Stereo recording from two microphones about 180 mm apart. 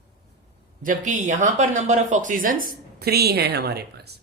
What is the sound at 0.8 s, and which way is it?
Speech, 45° right (ahead or behind).